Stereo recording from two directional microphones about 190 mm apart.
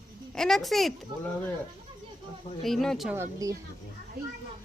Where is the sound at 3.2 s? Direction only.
20° right (ahead or behind).